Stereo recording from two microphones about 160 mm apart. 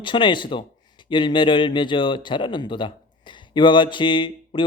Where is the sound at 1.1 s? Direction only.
30° left (ahead or behind).